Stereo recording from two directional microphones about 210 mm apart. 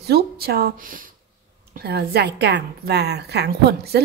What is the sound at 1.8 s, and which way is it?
A woman's voice, 50° right (ahead or behind).